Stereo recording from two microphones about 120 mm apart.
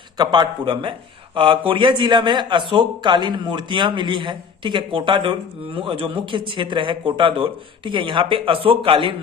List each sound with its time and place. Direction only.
0.2 s speech: 40° right (ahead or behind)